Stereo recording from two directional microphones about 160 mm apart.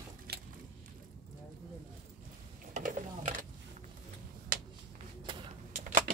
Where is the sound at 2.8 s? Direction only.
55° right (ahead or behind).